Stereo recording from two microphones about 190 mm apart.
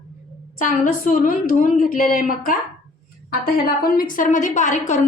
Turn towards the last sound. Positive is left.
turn(degrees=40)  # may be behind; listen again after turning